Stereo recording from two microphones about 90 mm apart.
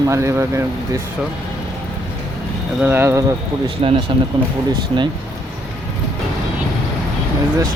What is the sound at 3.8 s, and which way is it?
Speech, 90° right.